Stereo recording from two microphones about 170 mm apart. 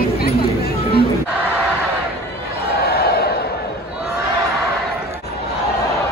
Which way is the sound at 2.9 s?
70° left (ahead or behind).